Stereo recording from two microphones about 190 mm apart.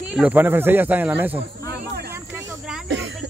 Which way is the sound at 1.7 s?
60° right (ahead or behind).